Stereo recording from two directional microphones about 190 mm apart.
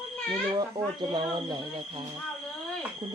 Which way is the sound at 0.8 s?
15° right (ahead or behind).